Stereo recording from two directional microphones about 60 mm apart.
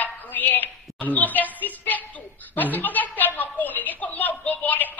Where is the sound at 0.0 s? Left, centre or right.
Left.